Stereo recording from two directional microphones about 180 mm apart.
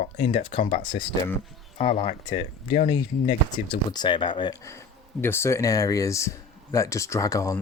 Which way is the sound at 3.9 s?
25° left (ahead or behind).